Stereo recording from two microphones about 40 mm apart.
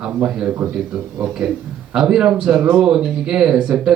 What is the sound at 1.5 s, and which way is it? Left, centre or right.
Speech, centre.